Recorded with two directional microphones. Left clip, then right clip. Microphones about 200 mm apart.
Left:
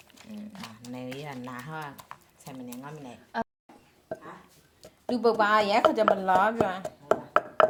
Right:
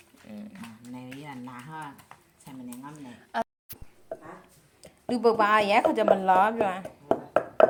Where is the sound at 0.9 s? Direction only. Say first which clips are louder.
Left 4 dB; 55° left (ahead or behind).